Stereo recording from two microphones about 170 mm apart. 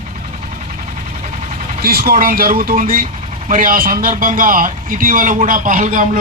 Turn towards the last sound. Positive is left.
turn(degrees=-50)  # may be behind; listen again after turning